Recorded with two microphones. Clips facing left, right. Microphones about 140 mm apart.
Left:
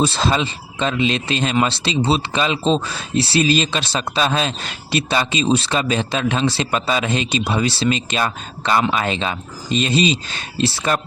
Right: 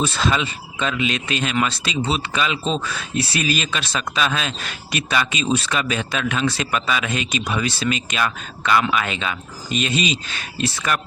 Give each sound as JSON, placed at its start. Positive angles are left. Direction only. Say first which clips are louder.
{"t": 0.0, "sound": "speech", "louder": "left 3 dB", "side_deg": 30}